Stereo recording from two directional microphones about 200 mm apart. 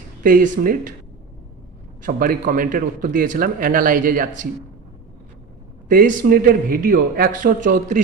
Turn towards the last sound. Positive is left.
turn(degrees=-40)  # may be behind; listen again after turning